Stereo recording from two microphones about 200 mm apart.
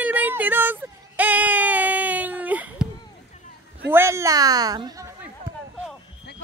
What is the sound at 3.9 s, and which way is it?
Speech, 15° right (ahead or behind).